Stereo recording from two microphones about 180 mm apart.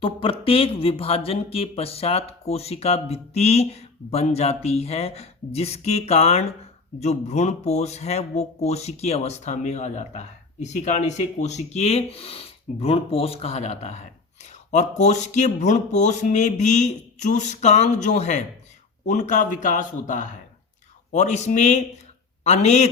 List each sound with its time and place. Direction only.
0.0 s a man's voice: 30° left (ahead or behind)